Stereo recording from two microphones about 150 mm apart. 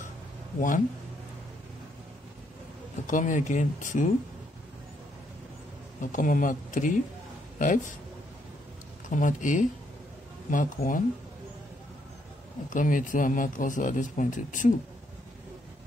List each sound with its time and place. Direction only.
0.6 s speech: 60° left (ahead or behind)
3.1 s speech: 60° left (ahead or behind)
6.1 s speech: 65° left (ahead or behind)
9.1 s speech: 60° left (ahead or behind)
12.6 s speech: 60° left (ahead or behind)